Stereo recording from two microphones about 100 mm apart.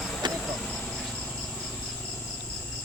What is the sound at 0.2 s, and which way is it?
Insect, 50° right (ahead or behind).